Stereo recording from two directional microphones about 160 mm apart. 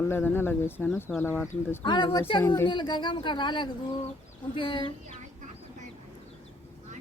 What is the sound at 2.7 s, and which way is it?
Speech, 30° left (ahead or behind).